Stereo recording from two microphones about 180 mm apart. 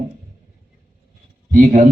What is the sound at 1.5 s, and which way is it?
Speech, 50° right (ahead or behind).